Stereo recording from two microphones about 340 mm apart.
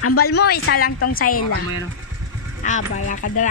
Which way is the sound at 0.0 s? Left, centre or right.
Left.